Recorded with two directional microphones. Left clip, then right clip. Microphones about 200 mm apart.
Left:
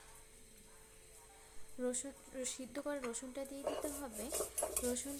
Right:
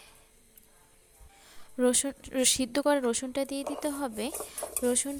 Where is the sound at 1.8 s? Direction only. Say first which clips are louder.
Right 14 dB; 45° right (ahead or behind).